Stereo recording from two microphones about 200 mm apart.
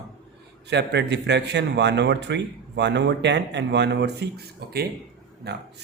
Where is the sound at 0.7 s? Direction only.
60° right (ahead or behind).